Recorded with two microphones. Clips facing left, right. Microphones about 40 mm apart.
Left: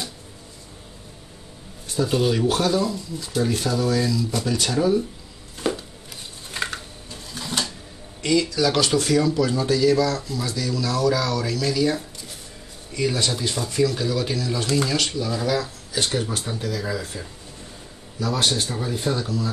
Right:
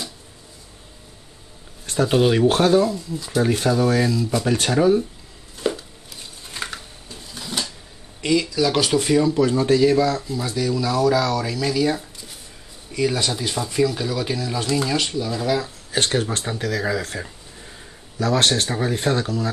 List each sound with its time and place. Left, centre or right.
2.0 s speech: right
5.6 s chopping: centre
6.5 s a sound: centre
8.2 s speech: centre
15.9 s speech: right
18.2 s speech: right